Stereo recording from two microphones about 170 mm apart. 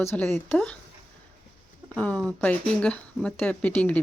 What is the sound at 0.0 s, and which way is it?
Speech, 15° left (ahead or behind).